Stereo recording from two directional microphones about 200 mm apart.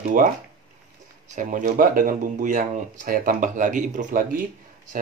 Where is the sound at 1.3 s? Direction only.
40° right (ahead or behind).